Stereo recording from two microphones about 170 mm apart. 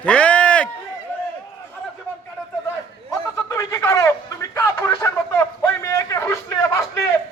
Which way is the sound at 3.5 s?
15° left (ahead or behind).